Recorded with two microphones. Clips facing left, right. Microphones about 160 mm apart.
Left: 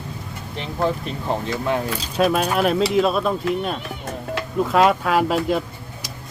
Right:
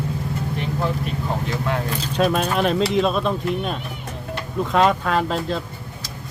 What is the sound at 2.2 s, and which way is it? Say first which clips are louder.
Speech: left 1 dB; 5° left (ahead or behind).